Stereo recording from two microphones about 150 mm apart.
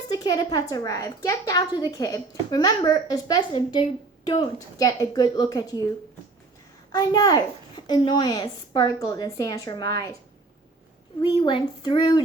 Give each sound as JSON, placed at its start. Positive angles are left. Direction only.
{"t": 0.1, "sound": "a woman's voice", "side_deg": 25}
{"t": 6.9, "sound": "a woman's voice", "side_deg": 25}
{"t": 11.2, "sound": "a woman's voice", "side_deg": 30}